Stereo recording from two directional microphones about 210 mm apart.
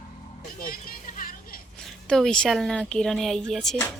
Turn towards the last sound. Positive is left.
turn(degrees=5)  # may be behind; listen again after turning